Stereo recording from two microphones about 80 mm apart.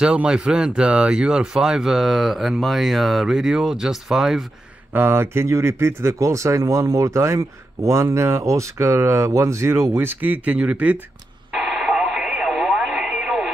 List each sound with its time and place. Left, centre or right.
0.0 s speech: centre
4.9 s speech: right
11.5 s radio: centre